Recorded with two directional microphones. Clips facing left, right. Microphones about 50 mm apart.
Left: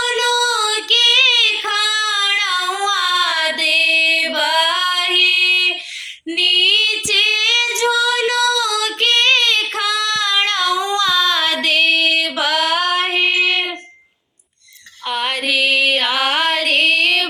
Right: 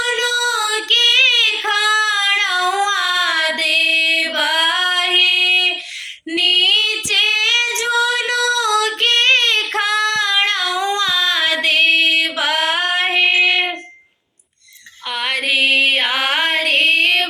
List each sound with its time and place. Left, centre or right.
0.0 s female singing: right
10.8 s a sound: right
11.0 s female singing: centre
15.4 s music: right
16.6 s female singing: right